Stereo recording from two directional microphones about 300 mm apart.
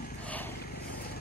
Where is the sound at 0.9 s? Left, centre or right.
Left.